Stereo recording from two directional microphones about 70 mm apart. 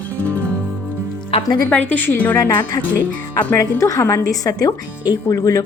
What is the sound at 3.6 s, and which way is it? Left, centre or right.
A woman's voice, left.